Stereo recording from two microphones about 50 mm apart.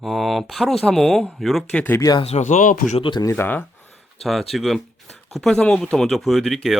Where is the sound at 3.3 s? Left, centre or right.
Left.